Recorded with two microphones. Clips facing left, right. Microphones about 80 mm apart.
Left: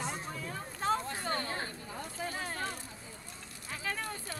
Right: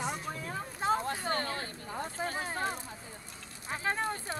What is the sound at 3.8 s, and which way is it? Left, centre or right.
Speech, right.